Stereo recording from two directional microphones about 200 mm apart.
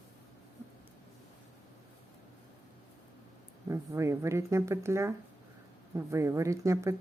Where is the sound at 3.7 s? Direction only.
15° right (ahead or behind).